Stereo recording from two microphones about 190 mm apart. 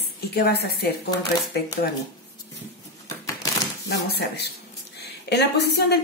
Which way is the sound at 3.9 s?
60° left (ahead or behind).